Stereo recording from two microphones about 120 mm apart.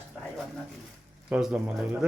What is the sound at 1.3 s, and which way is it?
Speech, 5° right (ahead or behind).